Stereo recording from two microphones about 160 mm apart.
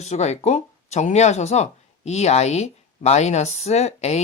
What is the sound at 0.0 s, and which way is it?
Speech, 45° left (ahead or behind).